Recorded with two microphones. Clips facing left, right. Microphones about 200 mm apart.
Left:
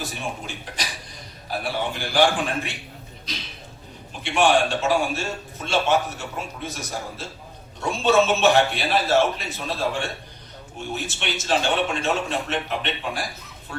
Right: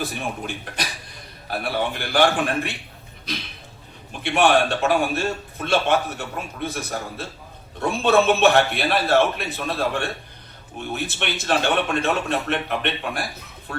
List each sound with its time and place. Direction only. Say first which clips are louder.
0.0 s a man's voice: right 3 dB; 60° right (ahead or behind)
4.2 s a man's voice: right 1 dB; 60° right (ahead or behind)